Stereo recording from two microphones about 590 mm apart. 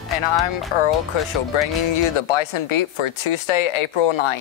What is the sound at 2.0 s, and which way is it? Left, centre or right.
Speech, left.